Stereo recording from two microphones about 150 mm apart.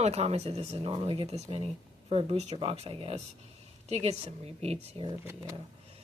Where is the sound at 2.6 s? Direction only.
40° right (ahead or behind).